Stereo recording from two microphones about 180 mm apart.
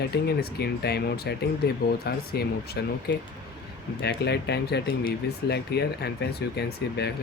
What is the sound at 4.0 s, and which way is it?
Speech, 65° left (ahead or behind).